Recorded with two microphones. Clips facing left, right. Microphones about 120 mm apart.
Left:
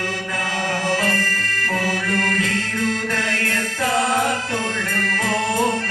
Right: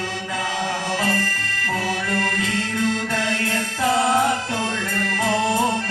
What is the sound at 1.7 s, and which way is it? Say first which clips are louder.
Music: left 1 dB; 5° right (ahead or behind).